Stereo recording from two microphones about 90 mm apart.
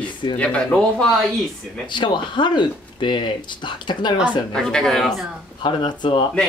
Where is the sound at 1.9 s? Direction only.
60° left (ahead or behind).